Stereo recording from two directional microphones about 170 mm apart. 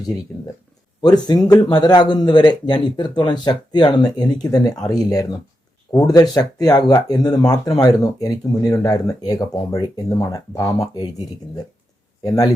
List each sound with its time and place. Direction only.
1.0 s speech: 25° left (ahead or behind)
12.2 s speech: 20° left (ahead or behind)